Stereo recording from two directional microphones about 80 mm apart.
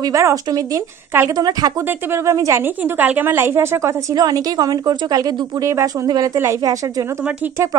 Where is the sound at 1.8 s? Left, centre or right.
Right.